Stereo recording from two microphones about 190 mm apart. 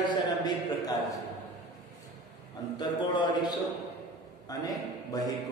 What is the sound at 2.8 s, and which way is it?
A man's voice, 25° left (ahead or behind).